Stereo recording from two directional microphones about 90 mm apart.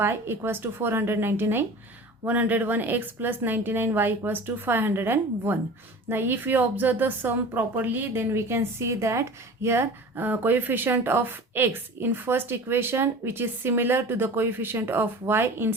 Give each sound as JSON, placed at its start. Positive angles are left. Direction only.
{"t": 0.0, "sound": "speech", "side_deg": -25}